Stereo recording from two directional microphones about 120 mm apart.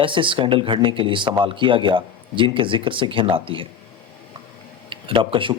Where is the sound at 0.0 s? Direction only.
45° right (ahead or behind).